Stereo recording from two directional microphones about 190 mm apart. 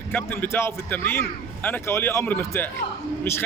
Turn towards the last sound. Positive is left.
turn(degrees=10)  # may be behind; listen again after turning